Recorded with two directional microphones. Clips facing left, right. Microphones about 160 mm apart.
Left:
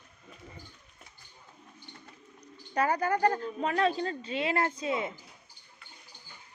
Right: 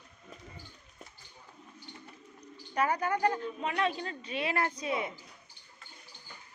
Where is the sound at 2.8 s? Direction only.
35° left (ahead or behind).